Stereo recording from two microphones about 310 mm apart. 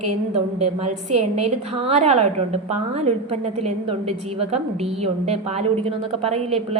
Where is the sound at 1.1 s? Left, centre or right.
Centre.